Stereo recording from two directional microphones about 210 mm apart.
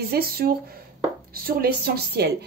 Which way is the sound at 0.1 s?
45° right (ahead or behind).